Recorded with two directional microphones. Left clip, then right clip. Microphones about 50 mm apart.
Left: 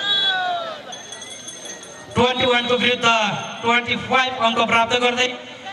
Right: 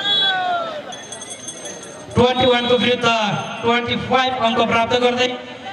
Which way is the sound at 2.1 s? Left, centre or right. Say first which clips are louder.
Right 2 dB; left.